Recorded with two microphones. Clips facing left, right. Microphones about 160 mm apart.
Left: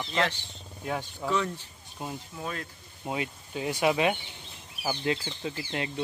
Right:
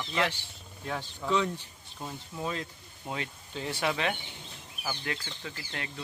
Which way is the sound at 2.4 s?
20° right (ahead or behind).